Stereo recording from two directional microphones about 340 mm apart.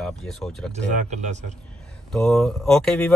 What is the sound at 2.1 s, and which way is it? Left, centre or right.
Speech, centre.